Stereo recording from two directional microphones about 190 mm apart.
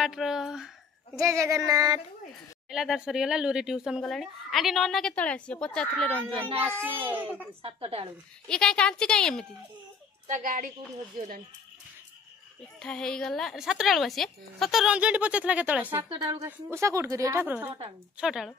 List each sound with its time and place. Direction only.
0.0 s speech: centre (ahead or behind)
1.1 s speech: 15° right (ahead or behind)
2.7 s speech: centre (ahead or behind)
7.6 s a woman's voice: 30° right (ahead or behind)
8.5 s speech: 5° left (ahead or behind)
10.2 s a child's voice: 45° right (ahead or behind)
12.7 s speech: 5° left (ahead or behind)
15.9 s a woman's voice: 20° right (ahead or behind); by 18.5 s 5° right (ahead or behind)